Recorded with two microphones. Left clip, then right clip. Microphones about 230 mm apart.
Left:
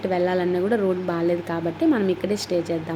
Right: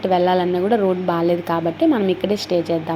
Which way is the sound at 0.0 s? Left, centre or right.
Centre.